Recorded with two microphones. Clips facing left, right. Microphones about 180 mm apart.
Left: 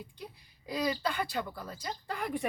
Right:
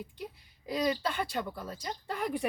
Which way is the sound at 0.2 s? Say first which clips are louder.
Right 4 dB; centre (ahead or behind).